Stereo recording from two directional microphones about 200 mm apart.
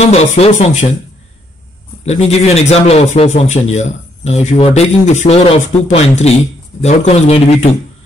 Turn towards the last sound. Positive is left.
turn(degrees=30)  # may be behind; listen again after turning